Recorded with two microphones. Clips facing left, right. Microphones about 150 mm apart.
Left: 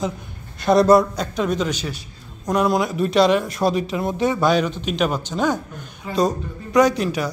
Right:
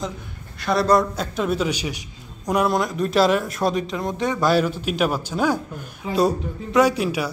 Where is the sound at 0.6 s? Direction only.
20° left (ahead or behind).